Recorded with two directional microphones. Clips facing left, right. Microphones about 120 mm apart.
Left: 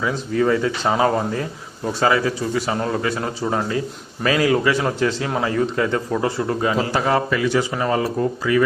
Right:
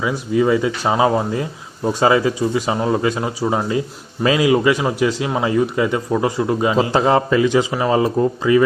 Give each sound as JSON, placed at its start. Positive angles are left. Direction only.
{"t": 0.0, "sound": "speech", "side_deg": -10}